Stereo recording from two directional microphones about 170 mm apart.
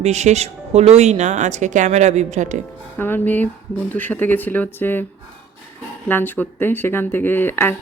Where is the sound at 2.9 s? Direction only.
10° left (ahead or behind).